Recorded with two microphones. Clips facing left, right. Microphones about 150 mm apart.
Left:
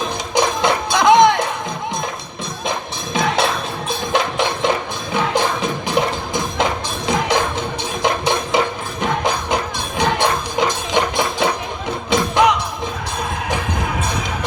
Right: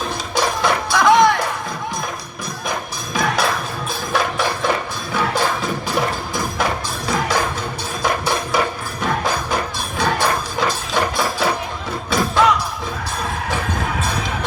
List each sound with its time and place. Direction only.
0.3 s music: 20° left (ahead or behind)
3.2 s music: 25° left (ahead or behind)